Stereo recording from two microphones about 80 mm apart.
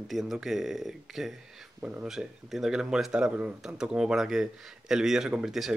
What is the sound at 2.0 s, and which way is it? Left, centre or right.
Speech, centre.